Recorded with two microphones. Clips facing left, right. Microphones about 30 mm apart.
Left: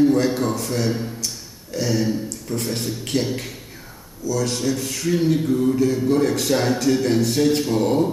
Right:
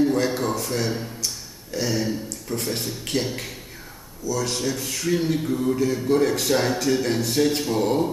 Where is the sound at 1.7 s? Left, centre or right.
Centre.